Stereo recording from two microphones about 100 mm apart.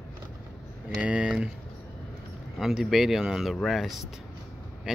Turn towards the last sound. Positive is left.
turn(degrees=0)  # may be behind; listen again after turning